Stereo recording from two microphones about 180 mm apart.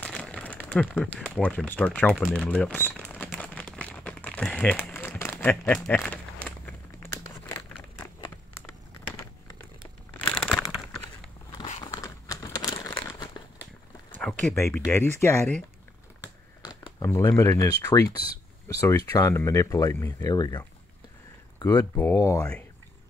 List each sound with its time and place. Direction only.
0.0 s speech: 5° left (ahead or behind)
3.1 s crumpling: 5° left (ahead or behind)
8.2 s a sound: 15° left (ahead or behind)
10.1 s crumpling: 5° left (ahead or behind)
11.8 s crumpling: 20° left (ahead or behind)
14.1 s a sound: 10° left (ahead or behind)
14.5 s speech: 15° left (ahead or behind)
16.6 s speech: 20° left (ahead or behind)
22.4 s speech: 5° left (ahead or behind)